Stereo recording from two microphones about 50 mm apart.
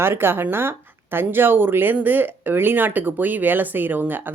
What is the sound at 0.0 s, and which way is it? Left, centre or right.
Speech, right.